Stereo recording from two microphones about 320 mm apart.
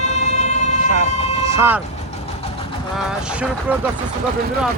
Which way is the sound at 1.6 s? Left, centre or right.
Centre.